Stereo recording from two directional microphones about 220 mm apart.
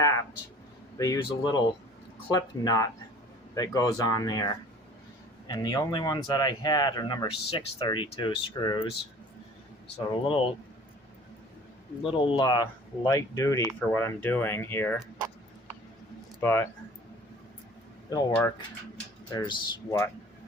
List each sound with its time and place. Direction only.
0.9 s speech: 15° left (ahead or behind)
10.2 s speech: 25° left (ahead or behind)
12.0 s speech: 25° left (ahead or behind)
16.4 s speech: 10° left (ahead or behind)
18.1 s speech: 15° left (ahead or behind)